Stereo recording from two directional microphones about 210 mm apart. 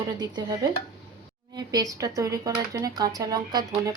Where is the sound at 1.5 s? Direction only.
15° right (ahead or behind).